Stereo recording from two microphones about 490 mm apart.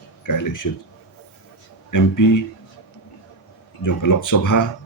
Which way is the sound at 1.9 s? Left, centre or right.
Left.